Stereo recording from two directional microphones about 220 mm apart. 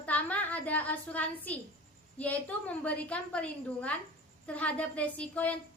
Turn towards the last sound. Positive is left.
turn(degrees=5)  # may be behind; listen again after turning